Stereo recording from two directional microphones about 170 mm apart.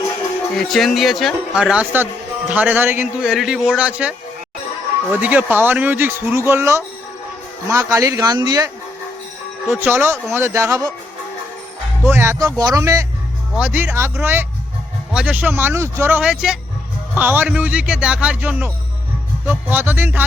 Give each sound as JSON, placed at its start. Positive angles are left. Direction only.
{"t": 0.5, "sound": "speech", "side_deg": 0}
{"t": 5.2, "sound": "speech", "side_deg": -10}
{"t": 9.6, "sound": "speech", "side_deg": -10}
{"t": 12.0, "sound": "speech", "side_deg": -15}